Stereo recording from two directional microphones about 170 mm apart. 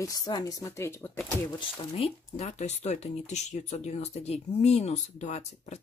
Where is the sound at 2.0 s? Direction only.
40° left (ahead or behind).